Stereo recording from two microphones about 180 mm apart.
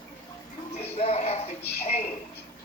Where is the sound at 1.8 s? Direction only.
35° left (ahead or behind).